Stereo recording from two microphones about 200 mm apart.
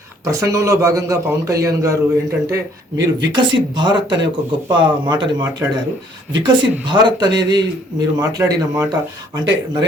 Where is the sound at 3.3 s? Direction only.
25° right (ahead or behind).